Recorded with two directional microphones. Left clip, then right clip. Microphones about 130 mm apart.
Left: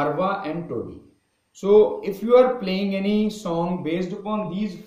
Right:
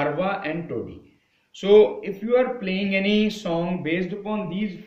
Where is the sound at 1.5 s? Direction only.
50° left (ahead or behind).